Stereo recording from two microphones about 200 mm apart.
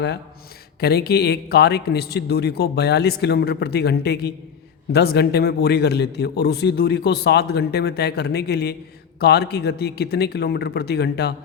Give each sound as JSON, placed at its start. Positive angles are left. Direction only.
{"t": 0.8, "sound": "a man's voice", "side_deg": 50}